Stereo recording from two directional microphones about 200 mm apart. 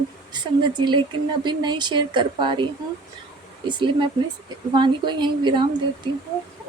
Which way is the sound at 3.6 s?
25° right (ahead or behind).